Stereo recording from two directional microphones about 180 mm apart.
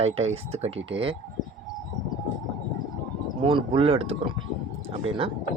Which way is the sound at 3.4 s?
30° right (ahead or behind).